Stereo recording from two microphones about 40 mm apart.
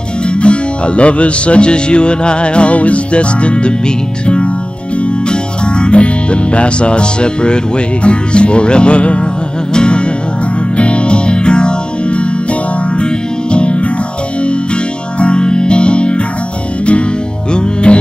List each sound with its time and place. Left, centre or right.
0.3 s music: left
5.3 s speech: left
9.8 s music: left
15.1 s music: left
17.5 s music: left